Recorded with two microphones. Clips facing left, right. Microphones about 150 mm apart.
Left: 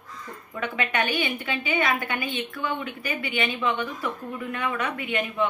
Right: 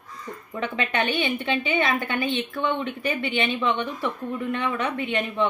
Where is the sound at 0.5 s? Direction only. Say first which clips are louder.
Right 1 dB; 30° right (ahead or behind).